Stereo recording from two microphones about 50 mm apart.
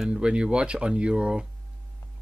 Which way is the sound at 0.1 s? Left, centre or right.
Centre.